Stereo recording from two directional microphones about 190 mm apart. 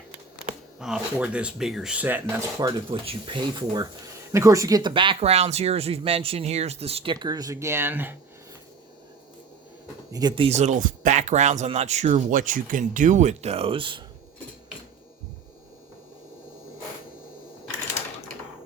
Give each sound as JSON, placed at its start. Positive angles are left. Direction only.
{"t": 0.8, "sound": "speech", "side_deg": -5}
{"t": 10.1, "sound": "speech", "side_deg": -20}